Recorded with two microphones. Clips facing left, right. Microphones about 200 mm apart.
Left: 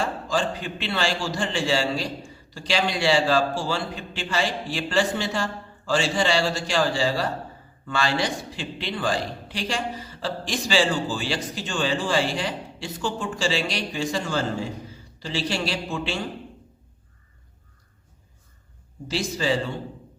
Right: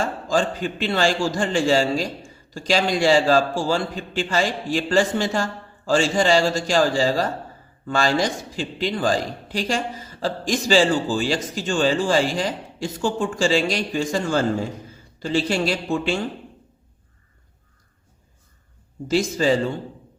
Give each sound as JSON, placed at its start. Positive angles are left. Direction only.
{"t": 0.0, "sound": "a man's voice", "side_deg": -45}
{"t": 19.0, "sound": "a man's voice", "side_deg": -45}